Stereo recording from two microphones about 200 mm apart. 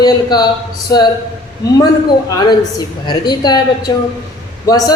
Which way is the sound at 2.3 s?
20° left (ahead or behind).